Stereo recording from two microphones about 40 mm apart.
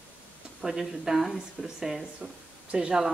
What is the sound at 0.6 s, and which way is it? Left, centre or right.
A woman's voice, centre.